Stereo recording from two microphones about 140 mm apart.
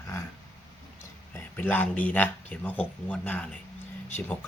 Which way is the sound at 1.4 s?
15° left (ahead or behind).